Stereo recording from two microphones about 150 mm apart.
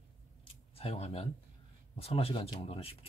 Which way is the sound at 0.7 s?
45° left (ahead or behind).